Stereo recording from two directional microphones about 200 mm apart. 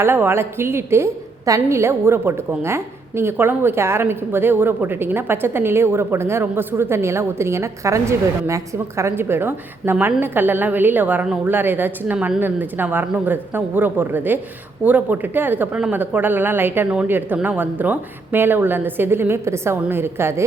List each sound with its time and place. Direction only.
0.0 s a woman's voice: 10° right (ahead or behind)